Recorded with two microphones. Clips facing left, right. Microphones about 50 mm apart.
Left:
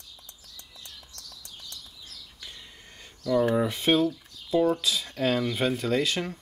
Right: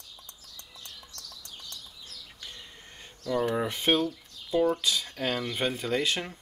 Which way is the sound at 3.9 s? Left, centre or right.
Centre.